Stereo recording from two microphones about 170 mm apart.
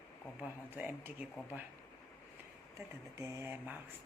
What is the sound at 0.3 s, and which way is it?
Speech, 10° right (ahead or behind).